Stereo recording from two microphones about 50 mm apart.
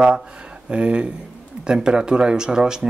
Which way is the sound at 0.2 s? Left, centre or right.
Centre.